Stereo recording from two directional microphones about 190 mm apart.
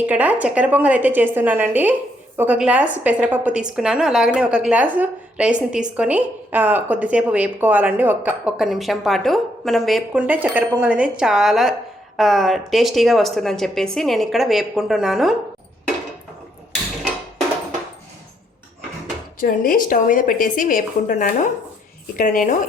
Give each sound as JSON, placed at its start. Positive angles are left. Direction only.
{"t": 0.0, "sound": "a woman's voice", "side_deg": -10}
{"t": 19.4, "sound": "speech", "side_deg": 45}